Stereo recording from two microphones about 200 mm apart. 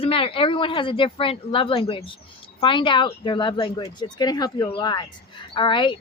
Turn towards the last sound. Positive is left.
turn(degrees=25)  # may be behind; listen again after turning